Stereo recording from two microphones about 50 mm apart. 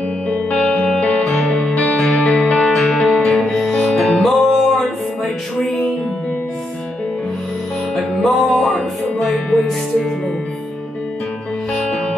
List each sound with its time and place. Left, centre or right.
0.3 s music: left
1.2 s music: centre
1.5 s music: centre
3.7 s music: centre
4.0 s music: centre
7.9 s music: centre